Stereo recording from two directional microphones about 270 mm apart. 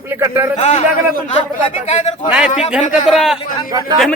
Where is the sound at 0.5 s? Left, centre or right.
Left.